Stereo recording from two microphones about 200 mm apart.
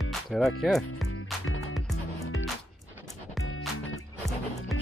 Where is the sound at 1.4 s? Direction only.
90° left.